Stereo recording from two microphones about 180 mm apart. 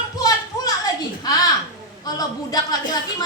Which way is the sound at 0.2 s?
20° left (ahead or behind).